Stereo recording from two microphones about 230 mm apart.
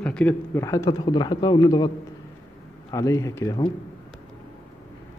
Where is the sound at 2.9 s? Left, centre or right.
Centre.